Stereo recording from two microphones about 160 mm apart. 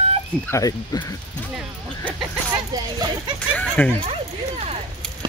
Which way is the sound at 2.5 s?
25° right (ahead or behind).